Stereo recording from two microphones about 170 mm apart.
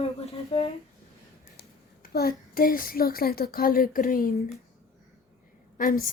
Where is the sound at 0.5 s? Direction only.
30° left (ahead or behind).